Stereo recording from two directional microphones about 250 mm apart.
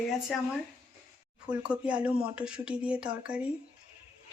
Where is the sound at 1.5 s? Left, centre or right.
Centre.